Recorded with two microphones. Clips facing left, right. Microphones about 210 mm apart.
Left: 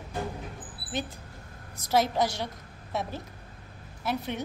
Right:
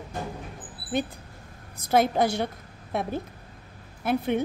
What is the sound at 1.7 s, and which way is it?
A woman's voice, 55° right (ahead or behind).